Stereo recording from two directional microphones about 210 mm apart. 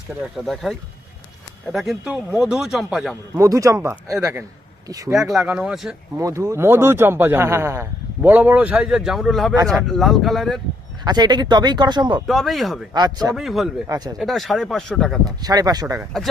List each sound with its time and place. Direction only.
0.2 s speech: centre (ahead or behind)
3.3 s speech: 15° right (ahead or behind)
5.3 s speech: 5° right (ahead or behind)
6.1 s speech: 15° right (ahead or behind); by 10.6 s centre (ahead or behind)
11.0 s speech: 20° right (ahead or behind)
12.3 s speech: centre (ahead or behind)
12.9 s speech: 20° right (ahead or behind)
13.3 s speech: centre (ahead or behind)
13.8 s speech: 20° right (ahead or behind)
14.2 s speech: centre (ahead or behind)
15.2 s speech: 20° right (ahead or behind)